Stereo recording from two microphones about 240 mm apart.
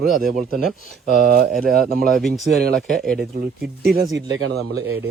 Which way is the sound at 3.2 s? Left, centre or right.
Right.